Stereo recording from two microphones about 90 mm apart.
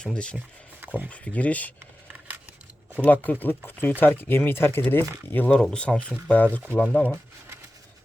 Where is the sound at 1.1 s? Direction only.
15° left (ahead or behind).